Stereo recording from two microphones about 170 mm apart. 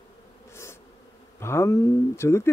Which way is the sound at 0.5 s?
15° left (ahead or behind).